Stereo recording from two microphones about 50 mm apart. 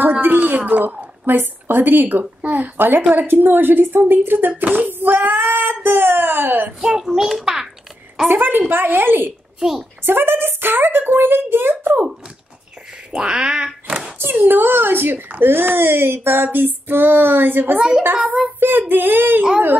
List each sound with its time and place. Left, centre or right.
0.0 s a sound: right
1.2 s speech: right
6.8 s a child's voice: centre
8.3 s speech: right
9.6 s a woman's voice: centre
10.0 s speech: right
13.1 s a child's voice: centre
13.8 s a sound: right
14.1 s speech: right
17.7 s a child's voice: centre
18.6 s speech: right